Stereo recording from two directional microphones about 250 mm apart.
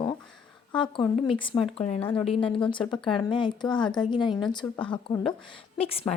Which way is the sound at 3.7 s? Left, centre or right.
Centre.